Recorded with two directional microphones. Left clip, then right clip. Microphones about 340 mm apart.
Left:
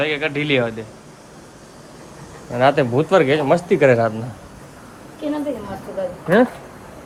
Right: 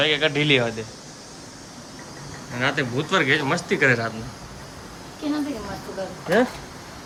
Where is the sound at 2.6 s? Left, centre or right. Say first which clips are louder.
Left 8 dB; centre.